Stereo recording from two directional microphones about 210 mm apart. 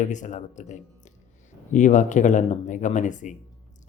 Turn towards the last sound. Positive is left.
turn(degrees=35)  # may be behind; listen again after turning